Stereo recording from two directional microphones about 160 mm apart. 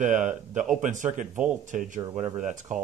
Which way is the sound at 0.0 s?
50° right (ahead or behind).